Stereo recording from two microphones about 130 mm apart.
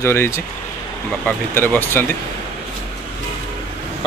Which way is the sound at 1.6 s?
15° left (ahead or behind).